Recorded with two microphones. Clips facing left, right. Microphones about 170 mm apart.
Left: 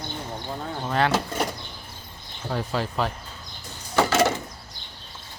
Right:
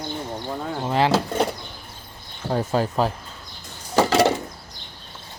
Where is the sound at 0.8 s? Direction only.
20° right (ahead or behind).